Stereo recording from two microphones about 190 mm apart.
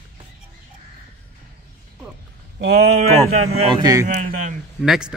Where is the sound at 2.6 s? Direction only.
60° right (ahead or behind).